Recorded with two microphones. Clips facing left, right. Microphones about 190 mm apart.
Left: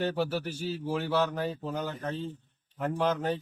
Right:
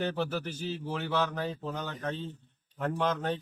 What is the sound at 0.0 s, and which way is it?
A man's voice, 5° left (ahead or behind).